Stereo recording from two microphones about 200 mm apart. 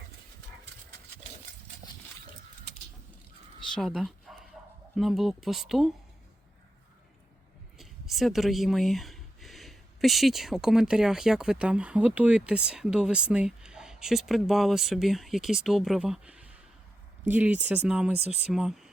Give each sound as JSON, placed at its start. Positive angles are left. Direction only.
{"t": 3.8, "sound": "speech", "side_deg": 0}
{"t": 7.8, "sound": "speech", "side_deg": 0}